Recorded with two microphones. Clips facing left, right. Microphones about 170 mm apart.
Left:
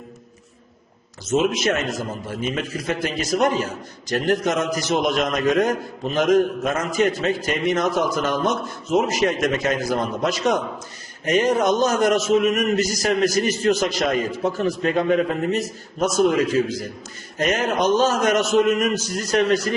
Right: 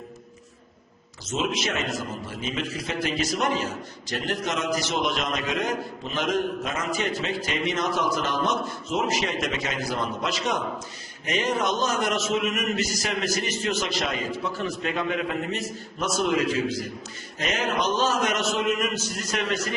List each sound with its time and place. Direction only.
1.3 s a man's voice: 55° left (ahead or behind); by 19.7 s 35° left (ahead or behind)